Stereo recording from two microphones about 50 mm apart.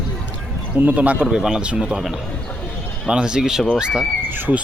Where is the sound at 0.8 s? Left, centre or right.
Right.